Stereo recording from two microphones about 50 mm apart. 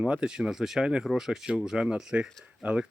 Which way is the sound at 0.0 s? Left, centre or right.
Centre.